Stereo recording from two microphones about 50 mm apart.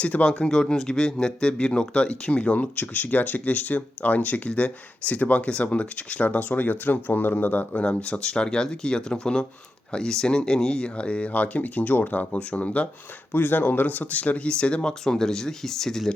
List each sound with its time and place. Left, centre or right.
0.0 s speech: left
7.8 s speech: left
13.3 s speech: left; by 16.1 s centre